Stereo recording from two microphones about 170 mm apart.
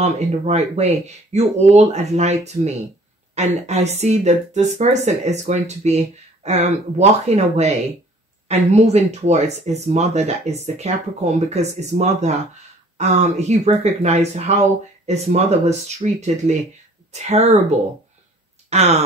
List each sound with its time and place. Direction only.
0.0 s speech: 40° right (ahead or behind)